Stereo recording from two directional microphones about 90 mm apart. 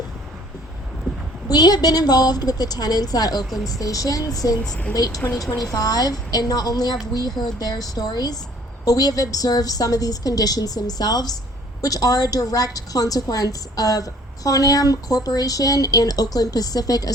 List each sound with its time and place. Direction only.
1.5 s a woman's voice: 50° left (ahead or behind)
4.6 s a woman's voice: 10° left (ahead or behind)
4.9 s a woman's voice: 45° left (ahead or behind)